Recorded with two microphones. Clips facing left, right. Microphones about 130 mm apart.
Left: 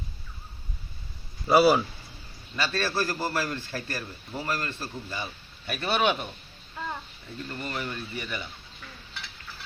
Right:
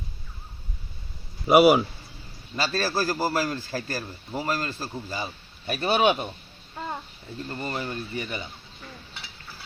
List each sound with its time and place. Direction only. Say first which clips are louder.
1.5 s speech: right 3 dB; 20° right (ahead or behind)
2.6 s a man's voice: right 2 dB; 35° right (ahead or behind)
6.7 s a sound: right 2 dB; 25° right (ahead or behind)
7.4 s speech: right 3 dB; 30° right (ahead or behind)